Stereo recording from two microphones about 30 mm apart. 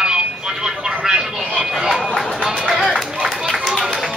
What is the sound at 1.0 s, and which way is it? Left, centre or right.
Music, centre.